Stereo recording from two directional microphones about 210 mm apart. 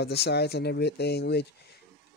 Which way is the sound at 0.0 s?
50° left (ahead or behind).